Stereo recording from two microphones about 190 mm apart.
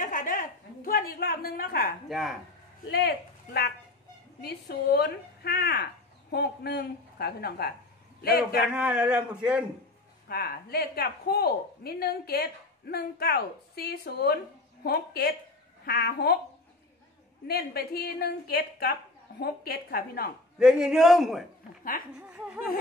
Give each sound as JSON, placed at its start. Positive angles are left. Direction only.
{"t": 0.0, "sound": "a sound", "side_deg": 45}
{"t": 2.0, "sound": "speech", "side_deg": 0}
{"t": 2.9, "sound": "speech", "side_deg": 55}
{"t": 8.7, "sound": "speech", "side_deg": -5}
{"t": 10.2, "sound": "speech", "side_deg": 55}
{"t": 17.5, "sound": "a woman's voice", "side_deg": 55}
{"t": 20.5, "sound": "speech", "side_deg": -5}